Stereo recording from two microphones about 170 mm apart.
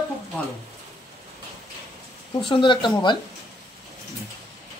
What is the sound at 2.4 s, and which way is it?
Speech, 30° left (ahead or behind).